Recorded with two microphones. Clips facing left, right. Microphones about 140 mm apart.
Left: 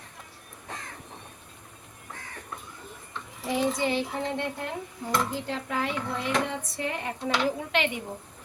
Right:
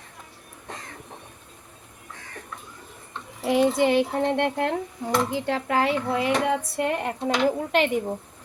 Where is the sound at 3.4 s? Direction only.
70° right (ahead or behind); by 7.9 s 45° right (ahead or behind).